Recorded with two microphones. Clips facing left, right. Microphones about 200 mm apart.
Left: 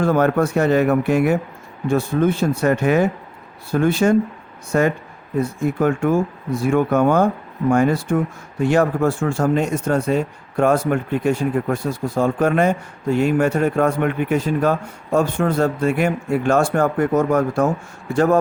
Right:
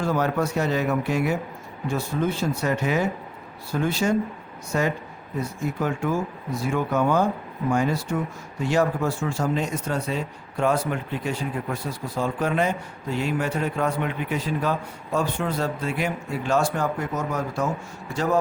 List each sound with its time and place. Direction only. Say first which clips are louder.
0.0 s speech: left 7 dB; 55° left (ahead or behind)